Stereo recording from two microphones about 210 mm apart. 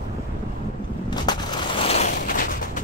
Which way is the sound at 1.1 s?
20° left (ahead or behind).